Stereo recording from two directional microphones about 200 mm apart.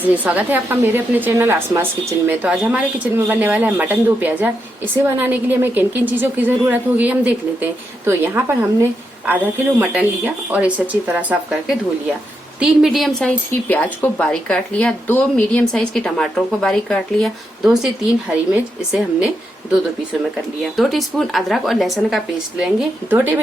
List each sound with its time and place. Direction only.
0.0 s a woman's voice: 10° right (ahead or behind)
20.6 s speech: centre (ahead or behind)